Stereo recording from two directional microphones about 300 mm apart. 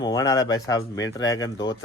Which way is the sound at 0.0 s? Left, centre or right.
Centre.